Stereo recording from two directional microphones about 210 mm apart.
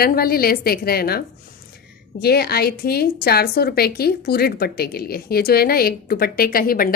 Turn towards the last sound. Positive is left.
turn(degrees=45)  # may be behind; listen again after turning